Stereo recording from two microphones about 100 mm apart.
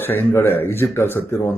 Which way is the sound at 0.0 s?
20° left (ahead or behind).